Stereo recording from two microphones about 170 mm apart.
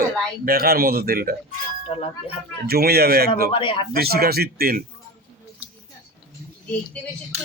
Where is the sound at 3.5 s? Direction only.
30° left (ahead or behind).